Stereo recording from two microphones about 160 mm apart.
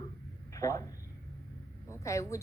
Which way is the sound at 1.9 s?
20° left (ahead or behind).